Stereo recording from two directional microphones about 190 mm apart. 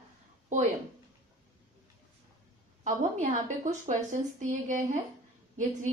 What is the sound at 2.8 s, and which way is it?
A woman's voice, 40° right (ahead or behind).